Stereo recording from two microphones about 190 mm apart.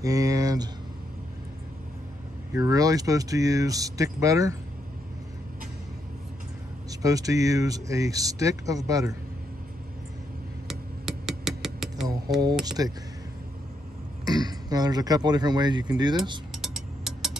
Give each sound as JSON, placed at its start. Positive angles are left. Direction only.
{"t": 0.0, "sound": "a sound", "side_deg": -20}
{"t": 2.5, "sound": "speech", "side_deg": -20}
{"t": 6.9, "sound": "speech", "side_deg": -20}
{"t": 10.7, "sound": "a sound", "side_deg": 0}
{"t": 12.6, "sound": "speech", "side_deg": -20}
{"t": 14.2, "sound": "speech", "side_deg": -20}
{"t": 16.5, "sound": "music", "side_deg": 0}